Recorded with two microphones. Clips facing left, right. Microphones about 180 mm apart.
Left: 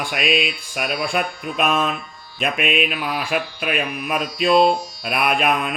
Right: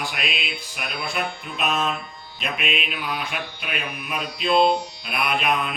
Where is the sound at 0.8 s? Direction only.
65° left (ahead or behind).